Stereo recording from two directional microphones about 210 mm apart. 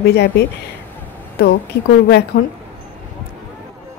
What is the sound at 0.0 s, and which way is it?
Speech, 50° left (ahead or behind).